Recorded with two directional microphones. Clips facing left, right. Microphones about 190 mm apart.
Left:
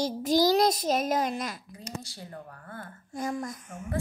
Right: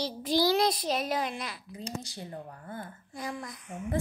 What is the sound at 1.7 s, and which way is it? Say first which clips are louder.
Speech: right 2 dB; 20° right (ahead or behind).